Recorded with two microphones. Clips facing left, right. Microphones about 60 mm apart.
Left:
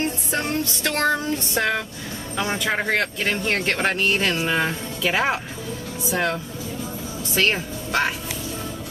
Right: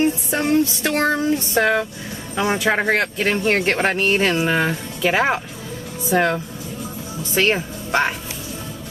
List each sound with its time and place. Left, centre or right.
0.0 s music: centre
2.3 s speech: centre